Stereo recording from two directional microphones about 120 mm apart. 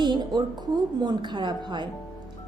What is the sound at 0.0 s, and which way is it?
A woman's voice, 40° right (ahead or behind).